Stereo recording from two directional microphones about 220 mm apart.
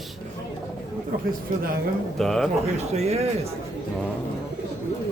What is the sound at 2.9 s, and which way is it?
Speech, 30° right (ahead or behind).